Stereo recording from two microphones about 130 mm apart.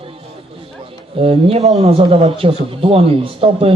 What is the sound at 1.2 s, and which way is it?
A man's voice, 45° right (ahead or behind).